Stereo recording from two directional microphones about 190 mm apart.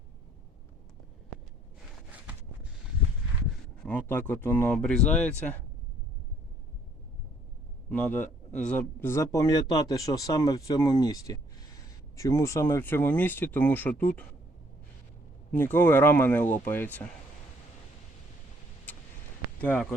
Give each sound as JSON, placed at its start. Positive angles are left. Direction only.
{"t": 3.8, "sound": "a man's voice", "side_deg": 10}
{"t": 7.9, "sound": "a man's voice", "side_deg": 5}
{"t": 15.5, "sound": "a man's voice", "side_deg": 10}
{"t": 19.6, "sound": "a man's voice", "side_deg": 10}